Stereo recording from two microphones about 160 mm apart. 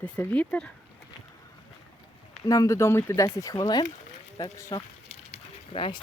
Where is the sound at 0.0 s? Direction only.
10° left (ahead or behind).